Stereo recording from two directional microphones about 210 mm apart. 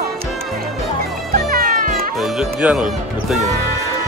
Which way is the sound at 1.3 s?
45° right (ahead or behind).